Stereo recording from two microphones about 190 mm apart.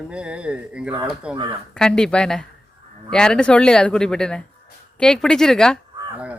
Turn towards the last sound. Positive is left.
turn(degrees=5)  # may be behind; listen again after turning